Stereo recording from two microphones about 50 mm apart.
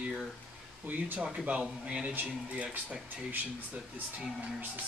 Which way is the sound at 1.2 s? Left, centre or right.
Right.